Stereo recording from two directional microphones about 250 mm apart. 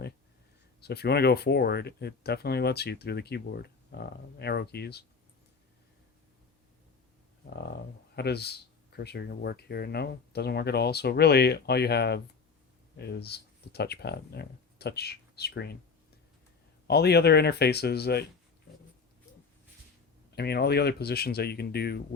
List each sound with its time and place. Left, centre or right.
0.8 s speech: left
8.1 s speech: left
16.8 s speech: left
20.3 s speech: left